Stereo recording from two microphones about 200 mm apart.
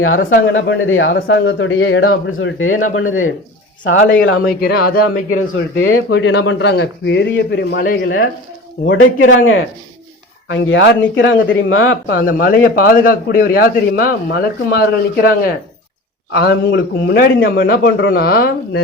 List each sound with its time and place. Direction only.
0.4 s a man's voice: 70° left (ahead or behind); by 3.3 s 90° left
3.8 s speech: 70° left (ahead or behind)
4.6 s a man's voice: 50° left (ahead or behind)
5.3 s a man's voice: 85° left
6.1 s a man's voice: 60° left (ahead or behind)
7.9 s a man's voice: 65° left (ahead or behind)
8.9 s speech: 80° left
10.5 s speech: 65° left (ahead or behind); by 12.1 s 90° left
12.1 s a man's voice: 45° left (ahead or behind)